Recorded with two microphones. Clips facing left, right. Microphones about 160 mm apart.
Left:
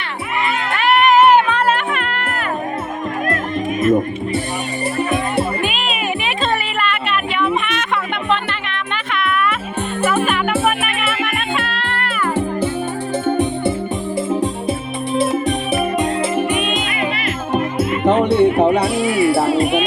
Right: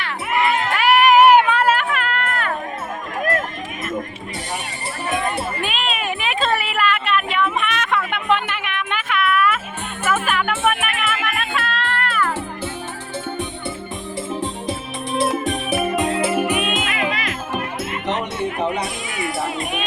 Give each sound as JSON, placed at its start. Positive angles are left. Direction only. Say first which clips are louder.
{"t": 0.7, "sound": "music", "louder": "left 1 dB", "side_deg": -5}
{"t": 5.6, "sound": "music", "louder": "left 3 dB", "side_deg": 0}
{"t": 13.2, "sound": "music", "louder": "left 10 dB", "side_deg": 50}
{"t": 15.2, "sound": "music", "louder": "left 2 dB", "side_deg": 0}
{"t": 17.5, "sound": "music", "louder": "left 10 dB", "side_deg": 25}
{"t": 18.0, "sound": "music", "louder": "left 12 dB", "side_deg": 55}
{"t": 18.3, "sound": "music", "louder": "left 10 dB", "side_deg": 30}